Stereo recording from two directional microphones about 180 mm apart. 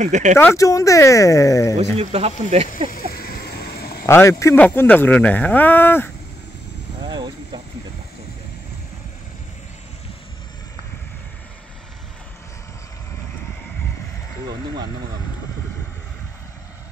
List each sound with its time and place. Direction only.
0.0 s speech: 40° right (ahead or behind)
0.4 s speech: 15° left (ahead or behind)
2.0 s speech: 35° right (ahead or behind)
3.1 s a sound: 60° left (ahead or behind)
4.0 s speech: 15° left (ahead or behind)
7.1 s vehicle: 25° right (ahead or behind)